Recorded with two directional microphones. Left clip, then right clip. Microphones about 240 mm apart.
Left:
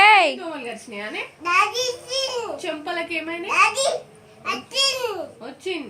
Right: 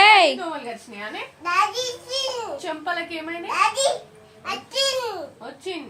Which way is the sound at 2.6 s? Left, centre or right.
Centre.